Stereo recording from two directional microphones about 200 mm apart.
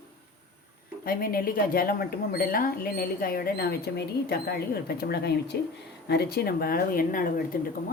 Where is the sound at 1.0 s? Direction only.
45° left (ahead or behind).